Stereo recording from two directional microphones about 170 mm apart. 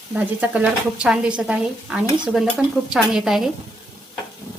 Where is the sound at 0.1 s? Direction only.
10° right (ahead or behind).